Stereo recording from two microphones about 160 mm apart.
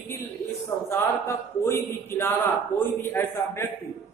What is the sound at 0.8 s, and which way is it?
A man's voice, 15° left (ahead or behind).